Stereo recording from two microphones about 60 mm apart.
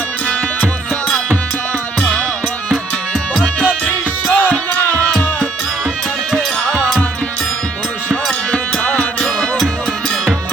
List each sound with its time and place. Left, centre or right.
3.8 s music: left
6.3 s music: centre
8.1 s music: centre